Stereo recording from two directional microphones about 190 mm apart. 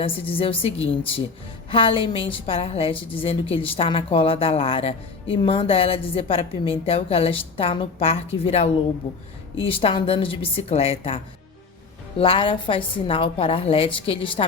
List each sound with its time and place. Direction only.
0.0 s a woman's voice: 30° left (ahead or behind)
1.7 s a woman's voice: 30° left (ahead or behind)